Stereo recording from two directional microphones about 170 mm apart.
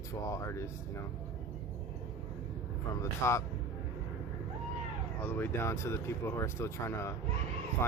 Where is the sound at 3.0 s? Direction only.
15° left (ahead or behind).